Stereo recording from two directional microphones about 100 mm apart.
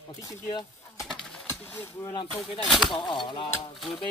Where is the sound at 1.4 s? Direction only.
20° left (ahead or behind).